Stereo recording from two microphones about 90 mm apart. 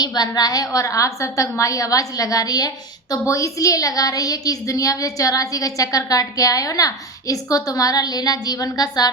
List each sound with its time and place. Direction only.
0.0 s a woman's voice: 50° left (ahead or behind)